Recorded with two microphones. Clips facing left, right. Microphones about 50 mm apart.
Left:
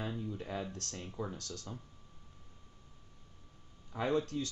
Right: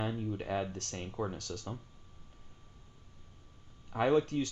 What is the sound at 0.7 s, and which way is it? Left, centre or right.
Speech, right.